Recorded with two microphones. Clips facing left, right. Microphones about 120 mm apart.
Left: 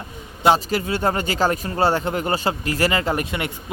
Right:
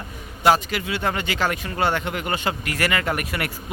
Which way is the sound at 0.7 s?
40° left (ahead or behind).